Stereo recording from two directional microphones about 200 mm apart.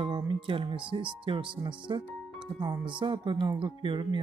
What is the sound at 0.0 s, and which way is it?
Speech, 25° right (ahead or behind).